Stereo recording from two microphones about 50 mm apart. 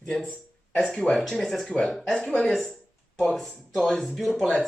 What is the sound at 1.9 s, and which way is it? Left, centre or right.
Speech, centre.